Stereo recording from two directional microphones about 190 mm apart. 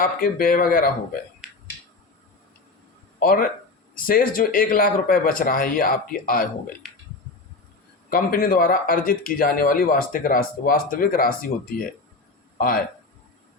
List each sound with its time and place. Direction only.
0.0 s speech: 50° left (ahead or behind)
3.2 s speech: 50° left (ahead or behind)
8.1 s speech: 50° left (ahead or behind)